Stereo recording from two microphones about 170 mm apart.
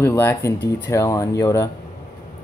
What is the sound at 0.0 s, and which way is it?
Speech, 15° left (ahead or behind).